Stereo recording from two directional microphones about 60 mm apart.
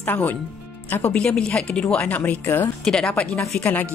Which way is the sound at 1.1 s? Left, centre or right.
Centre.